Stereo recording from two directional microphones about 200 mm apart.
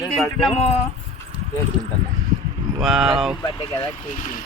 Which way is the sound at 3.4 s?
20° left (ahead or behind).